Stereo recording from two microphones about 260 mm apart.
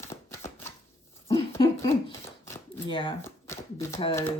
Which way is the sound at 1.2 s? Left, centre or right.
Centre.